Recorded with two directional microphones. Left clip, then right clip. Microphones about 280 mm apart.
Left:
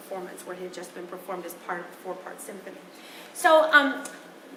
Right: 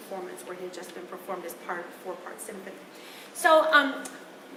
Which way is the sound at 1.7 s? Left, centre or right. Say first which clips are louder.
Left 1 dB; centre.